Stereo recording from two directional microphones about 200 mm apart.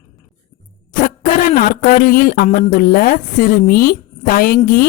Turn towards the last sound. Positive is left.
turn(degrees=45)  # may be behind; listen again after turning